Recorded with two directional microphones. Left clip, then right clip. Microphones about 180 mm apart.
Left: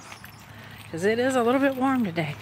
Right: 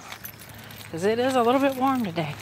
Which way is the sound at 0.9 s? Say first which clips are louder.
Even; 15° left (ahead or behind).